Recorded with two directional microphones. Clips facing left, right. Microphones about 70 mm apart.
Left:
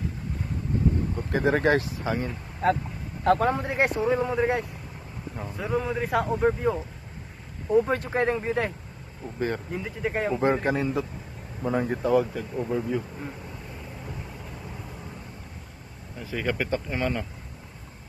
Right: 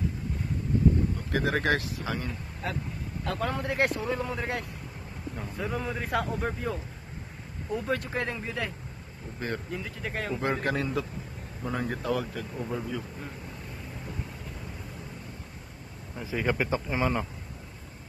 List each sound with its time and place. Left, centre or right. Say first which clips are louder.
1.1 s speech: left 4 dB; left
3.4 s speech: left 3 dB; left
5.3 s speech: left 5 dB; centre
7.7 s speech: left 7 dB; left
9.7 s speech: left 5 dB; centre
12.6 s speech: left 6 dB; centre
16.2 s speech: even; centre